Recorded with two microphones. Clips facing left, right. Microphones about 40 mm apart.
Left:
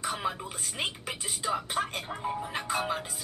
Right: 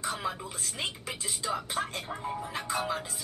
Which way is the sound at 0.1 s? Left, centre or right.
Centre.